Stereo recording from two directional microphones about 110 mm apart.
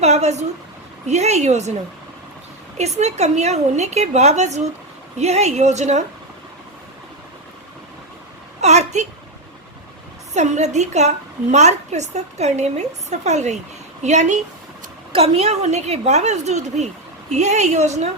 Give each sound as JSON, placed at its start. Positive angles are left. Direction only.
{"t": 0.0, "sound": "a woman's voice", "side_deg": -90}
{"t": 2.7, "sound": "a woman's voice", "side_deg": -85}
{"t": 8.6, "sound": "a woman's voice", "side_deg": -90}
{"t": 10.3, "sound": "a woman's voice", "side_deg": -90}
{"t": 15.1, "sound": "a woman's voice", "side_deg": -65}